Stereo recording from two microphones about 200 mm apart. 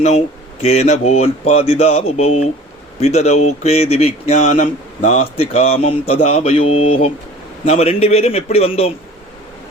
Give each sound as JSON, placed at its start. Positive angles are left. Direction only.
{"t": 0.6, "sound": "speech", "side_deg": 30}